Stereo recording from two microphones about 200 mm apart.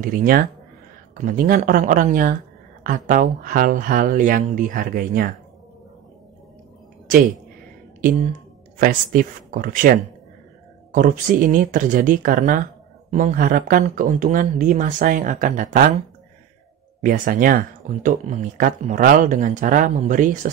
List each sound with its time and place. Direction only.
0.0 s speech: 45° right (ahead or behind)
8.0 s speech: 40° right (ahead or behind)
17.0 s speech: 45° right (ahead or behind)